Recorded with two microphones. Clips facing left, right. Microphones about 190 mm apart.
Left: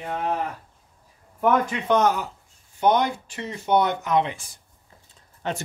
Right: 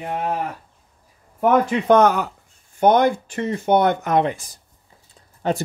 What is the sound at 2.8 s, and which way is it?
Speech, 50° right (ahead or behind).